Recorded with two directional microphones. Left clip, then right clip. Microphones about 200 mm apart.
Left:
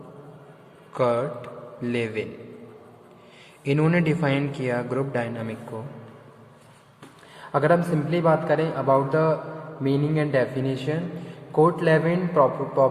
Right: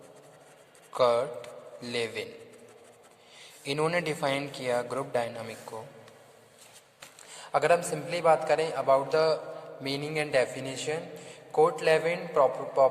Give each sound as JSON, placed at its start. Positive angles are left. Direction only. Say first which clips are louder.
{"t": 0.9, "sound": "a man's voice", "louder": "left 2 dB", "side_deg": -30}
{"t": 3.6, "sound": "a man's voice", "louder": "left 5 dB", "side_deg": -25}
{"t": 7.5, "sound": "a man's voice", "louder": "left 4 dB", "side_deg": -20}